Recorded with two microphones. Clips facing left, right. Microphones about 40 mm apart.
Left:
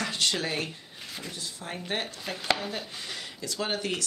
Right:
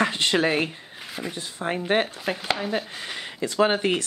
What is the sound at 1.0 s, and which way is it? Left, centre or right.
Speech, right.